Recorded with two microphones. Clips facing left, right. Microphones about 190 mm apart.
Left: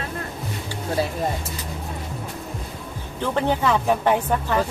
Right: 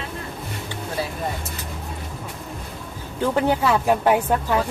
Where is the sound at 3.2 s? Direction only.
10° right (ahead or behind).